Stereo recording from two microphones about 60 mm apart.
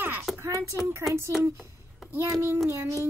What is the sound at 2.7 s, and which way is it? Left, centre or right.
Child singing, right.